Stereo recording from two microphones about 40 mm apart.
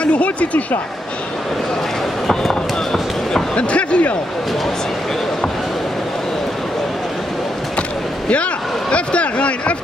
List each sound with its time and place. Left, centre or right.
0.0 s speech: left
3.5 s a sound: left
8.9 s speech: left